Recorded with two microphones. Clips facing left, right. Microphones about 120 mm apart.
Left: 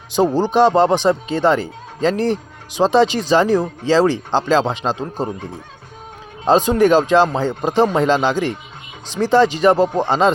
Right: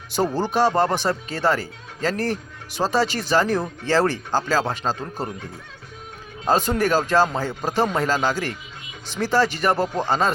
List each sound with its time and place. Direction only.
0.3 s speech: 20° left (ahead or behind)
6.4 s speech: 15° left (ahead or behind)